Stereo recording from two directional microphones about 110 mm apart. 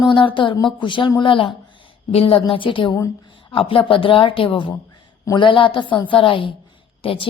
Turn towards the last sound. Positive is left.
turn(degrees=55)  # may be behind; listen again after turning